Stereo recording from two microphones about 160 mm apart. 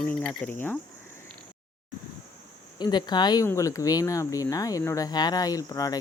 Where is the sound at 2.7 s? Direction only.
25° left (ahead or behind).